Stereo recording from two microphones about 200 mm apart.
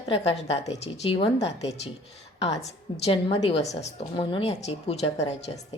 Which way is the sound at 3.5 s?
35° left (ahead or behind).